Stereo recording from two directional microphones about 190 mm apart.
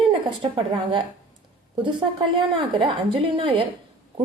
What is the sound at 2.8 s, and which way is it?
Speech, 25° right (ahead or behind).